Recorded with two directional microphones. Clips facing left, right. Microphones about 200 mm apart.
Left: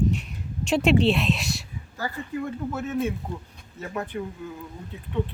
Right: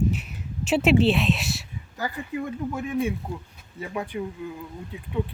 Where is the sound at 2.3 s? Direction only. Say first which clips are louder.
Even; 15° right (ahead or behind).